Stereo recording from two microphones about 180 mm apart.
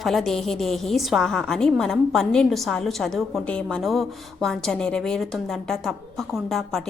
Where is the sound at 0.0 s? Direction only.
Centre (ahead or behind).